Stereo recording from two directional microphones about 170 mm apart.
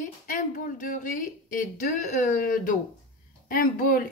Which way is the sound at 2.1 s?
55° left (ahead or behind).